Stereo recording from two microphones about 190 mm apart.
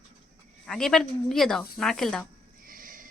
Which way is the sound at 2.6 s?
45° right (ahead or behind).